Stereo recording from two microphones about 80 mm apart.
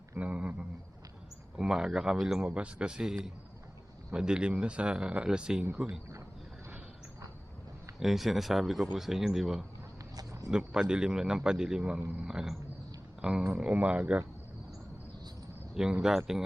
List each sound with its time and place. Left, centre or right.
0.2 s a man's voice: centre
1.5 s a man's voice: centre
7.9 s a man's voice: centre
12.2 s a man's voice: centre
15.7 s a man's voice: centre